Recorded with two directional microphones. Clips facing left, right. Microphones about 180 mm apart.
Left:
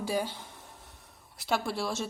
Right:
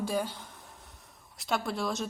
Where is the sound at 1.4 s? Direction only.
Centre (ahead or behind).